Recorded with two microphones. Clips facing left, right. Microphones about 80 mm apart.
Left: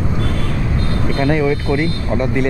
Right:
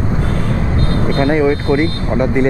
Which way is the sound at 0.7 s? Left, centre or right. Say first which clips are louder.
Right 4 dB; right.